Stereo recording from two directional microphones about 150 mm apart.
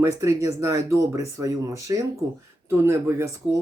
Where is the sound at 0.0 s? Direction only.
20° right (ahead or behind).